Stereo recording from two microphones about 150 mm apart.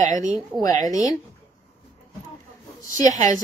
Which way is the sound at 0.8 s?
20° left (ahead or behind).